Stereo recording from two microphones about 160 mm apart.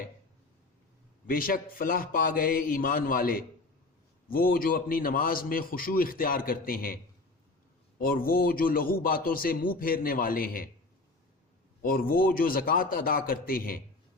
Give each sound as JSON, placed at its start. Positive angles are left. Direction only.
{"t": 1.3, "sound": "a man's voice", "side_deg": 65}
{"t": 11.8, "sound": "a man's voice", "side_deg": 65}